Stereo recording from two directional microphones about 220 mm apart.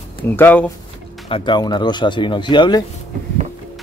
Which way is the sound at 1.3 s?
20° left (ahead or behind).